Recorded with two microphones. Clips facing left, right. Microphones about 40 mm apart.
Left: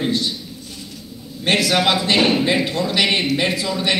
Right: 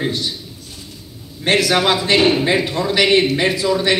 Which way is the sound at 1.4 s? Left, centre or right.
Right.